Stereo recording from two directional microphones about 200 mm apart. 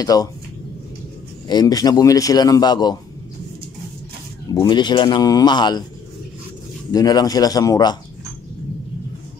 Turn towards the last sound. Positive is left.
turn(degrees=20)  # may be behind; listen again after turning